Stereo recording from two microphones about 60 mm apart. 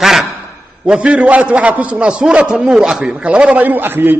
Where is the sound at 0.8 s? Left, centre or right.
Centre.